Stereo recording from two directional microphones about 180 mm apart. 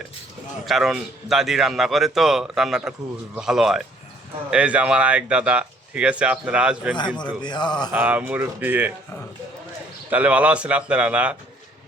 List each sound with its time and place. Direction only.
0.6 s a man's voice: centre (ahead or behind)
7.4 s speech: 25° left (ahead or behind)
7.9 s speech: 10° right (ahead or behind)
10.1 s speech: 10° right (ahead or behind)